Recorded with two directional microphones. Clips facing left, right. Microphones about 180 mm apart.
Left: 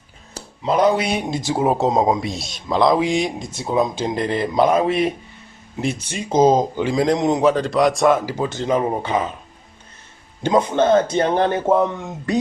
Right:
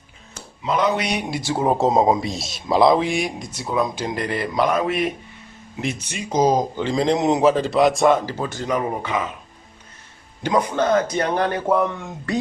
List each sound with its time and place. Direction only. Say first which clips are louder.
0.3 s speech: left 4 dB; 35° left (ahead or behind)
1.4 s speech: even; 15° left (ahead or behind); by 3.0 s 5° right (ahead or behind)
3.0 s speech: left 3 dB; 20° left (ahead or behind)
6.8 s speech: right 1 dB; 5° left (ahead or behind)
8.3 s speech: left 4 dB; 20° left (ahead or behind)
10.4 s speech: left 3 dB; 25° left (ahead or behind)